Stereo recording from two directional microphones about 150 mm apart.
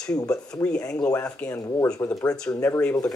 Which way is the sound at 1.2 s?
10° left (ahead or behind).